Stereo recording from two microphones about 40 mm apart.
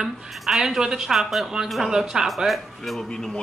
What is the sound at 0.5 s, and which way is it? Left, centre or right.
A woman's voice, centre.